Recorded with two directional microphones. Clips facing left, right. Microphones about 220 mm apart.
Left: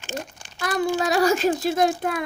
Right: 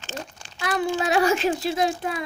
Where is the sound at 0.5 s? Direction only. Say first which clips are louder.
Left 1 dB; 40° left (ahead or behind).